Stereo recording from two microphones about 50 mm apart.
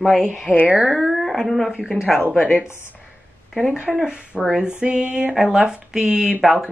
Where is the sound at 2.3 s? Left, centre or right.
Left.